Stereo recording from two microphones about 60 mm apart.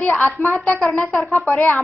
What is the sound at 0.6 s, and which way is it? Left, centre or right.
Speech, centre.